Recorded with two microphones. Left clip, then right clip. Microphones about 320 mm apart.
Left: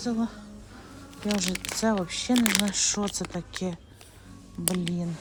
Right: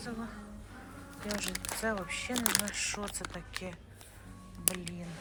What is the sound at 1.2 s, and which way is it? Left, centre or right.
Speech, centre.